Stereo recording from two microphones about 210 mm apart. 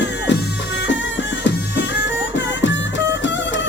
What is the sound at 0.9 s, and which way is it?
Music, 60° left (ahead or behind).